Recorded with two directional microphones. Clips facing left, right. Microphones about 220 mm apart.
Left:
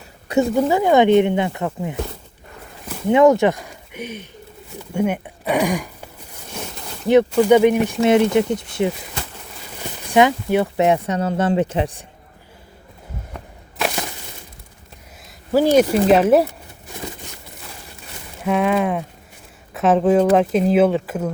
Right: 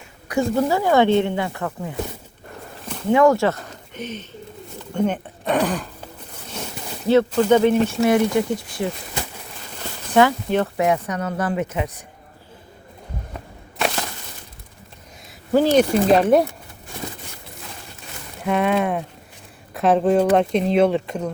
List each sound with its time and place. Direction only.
0.5 s speech: 20° left (ahead or behind)
3.1 s speech: 20° left (ahead or behind)
7.1 s speech: 15° left (ahead or behind)
10.8 s speech: 25° left (ahead or behind)
15.5 s speech: 10° left (ahead or behind)
18.4 s speech: centre (ahead or behind)